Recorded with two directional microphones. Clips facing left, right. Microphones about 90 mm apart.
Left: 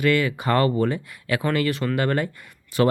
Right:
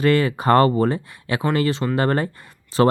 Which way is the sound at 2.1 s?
35° right (ahead or behind).